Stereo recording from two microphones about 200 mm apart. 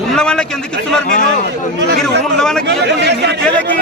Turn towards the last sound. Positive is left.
turn(degrees=-55)  # may be behind; listen again after turning